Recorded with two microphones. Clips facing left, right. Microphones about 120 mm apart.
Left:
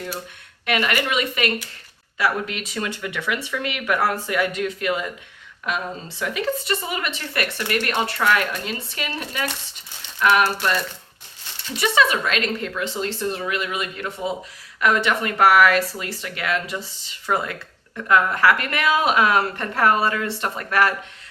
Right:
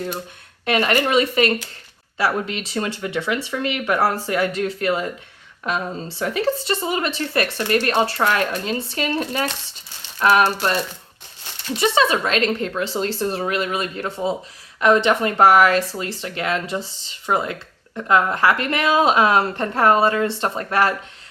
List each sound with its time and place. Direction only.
0.6 s speech: 30° right (ahead or behind)